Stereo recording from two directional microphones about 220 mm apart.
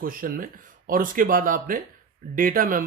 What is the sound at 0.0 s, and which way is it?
Speech, 40° right (ahead or behind).